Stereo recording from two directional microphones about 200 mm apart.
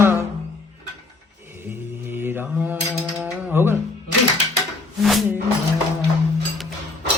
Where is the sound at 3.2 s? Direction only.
10° right (ahead or behind).